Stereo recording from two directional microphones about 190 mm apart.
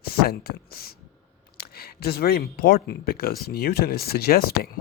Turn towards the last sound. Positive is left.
turn(degrees=55)  # may be behind; listen again after turning